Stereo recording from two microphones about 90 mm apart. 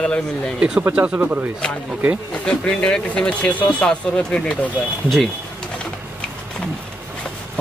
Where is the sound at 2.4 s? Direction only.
10° left (ahead or behind).